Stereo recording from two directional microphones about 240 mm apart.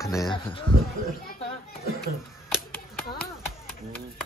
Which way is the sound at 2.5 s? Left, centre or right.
Centre.